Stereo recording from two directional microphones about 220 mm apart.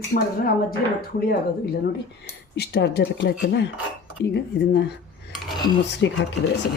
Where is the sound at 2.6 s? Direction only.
50° left (ahead or behind).